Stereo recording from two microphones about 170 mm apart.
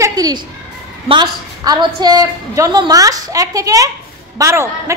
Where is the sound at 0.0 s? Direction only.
20° right (ahead or behind).